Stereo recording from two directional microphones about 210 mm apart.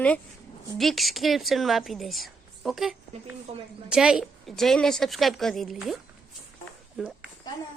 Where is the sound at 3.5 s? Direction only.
30° right (ahead or behind).